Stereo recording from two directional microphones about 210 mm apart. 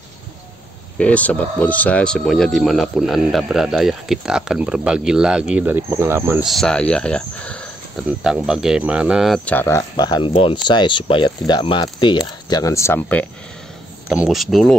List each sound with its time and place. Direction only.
0.9 s speech: 5° left (ahead or behind); by 6.5 s 10° right (ahead or behind)
6.5 s speech: 5° left (ahead or behind)
8.1 s speech: 5° right (ahead or behind)
14.0 s speech: centre (ahead or behind)